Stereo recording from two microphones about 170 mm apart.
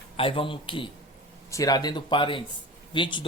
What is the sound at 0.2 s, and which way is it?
Speech, 30° left (ahead or behind).